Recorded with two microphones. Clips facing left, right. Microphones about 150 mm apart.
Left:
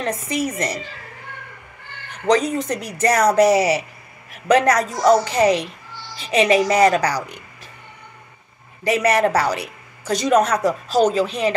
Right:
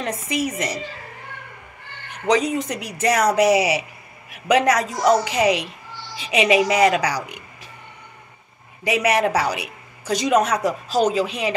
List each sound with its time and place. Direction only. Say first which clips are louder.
0.0 s speech: left 1 dB; 10° right (ahead or behind)
2.2 s speech: left 2 dB; 10° right (ahead or behind)
8.8 s speech: left 2 dB; 10° right (ahead or behind)